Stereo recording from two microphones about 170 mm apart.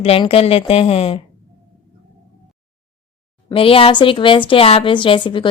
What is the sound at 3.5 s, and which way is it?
A woman's voice, 35° left (ahead or behind).